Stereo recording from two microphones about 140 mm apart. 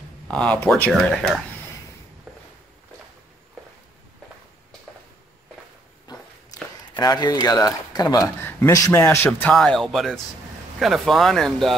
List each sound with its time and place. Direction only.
0.3 s speech: 10° left (ahead or behind)
6.1 s a sound: 30° left (ahead or behind)
7.0 s speech: 30° left (ahead or behind)
8.4 s speech: 15° left (ahead or behind)
9.5 s speech: 5° left (ahead or behind)